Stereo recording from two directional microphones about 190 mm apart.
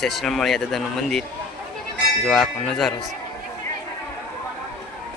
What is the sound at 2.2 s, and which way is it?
Speech, centre (ahead or behind).